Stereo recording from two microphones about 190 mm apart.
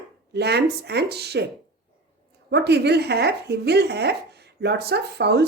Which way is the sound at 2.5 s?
60° right (ahead or behind).